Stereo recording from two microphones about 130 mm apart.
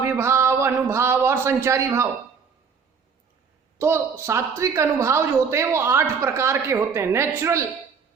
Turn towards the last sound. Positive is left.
turn(degrees=-20)  # may be behind; listen again after turning